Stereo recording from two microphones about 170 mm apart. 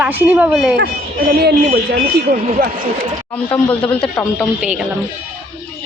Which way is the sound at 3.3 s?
10° left (ahead or behind).